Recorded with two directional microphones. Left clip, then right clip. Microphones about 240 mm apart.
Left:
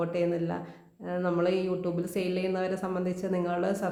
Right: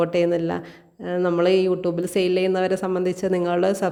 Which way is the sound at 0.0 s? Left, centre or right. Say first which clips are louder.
Right 9 dB; right.